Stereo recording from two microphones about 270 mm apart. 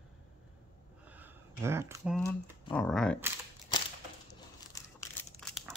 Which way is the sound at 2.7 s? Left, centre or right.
Centre.